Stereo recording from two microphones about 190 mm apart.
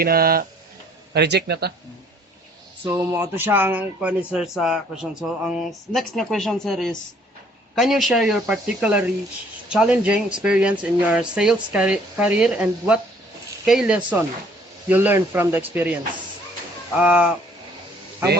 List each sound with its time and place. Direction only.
0.0 s speech: 50° right (ahead or behind)
1.1 s speech: 60° right (ahead or behind)
2.9 s speech: 10° right (ahead or behind)
16.9 s speech: 5° right (ahead or behind)